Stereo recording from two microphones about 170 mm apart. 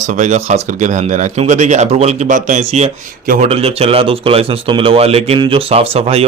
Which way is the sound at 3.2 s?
55° right (ahead or behind).